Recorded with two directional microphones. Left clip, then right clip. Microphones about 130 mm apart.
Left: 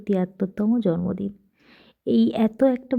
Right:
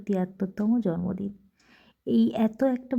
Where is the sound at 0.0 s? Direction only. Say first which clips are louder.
Left 5 dB; 35° left (ahead or behind).